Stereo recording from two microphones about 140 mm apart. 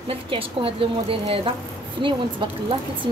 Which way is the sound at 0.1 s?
40° right (ahead or behind).